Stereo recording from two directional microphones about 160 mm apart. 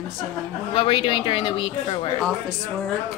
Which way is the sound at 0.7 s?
35° left (ahead or behind).